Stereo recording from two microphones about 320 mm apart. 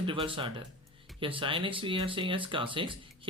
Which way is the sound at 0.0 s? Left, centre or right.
Centre.